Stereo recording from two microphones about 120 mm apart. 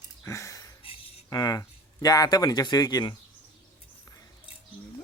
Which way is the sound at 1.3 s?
30° left (ahead or behind).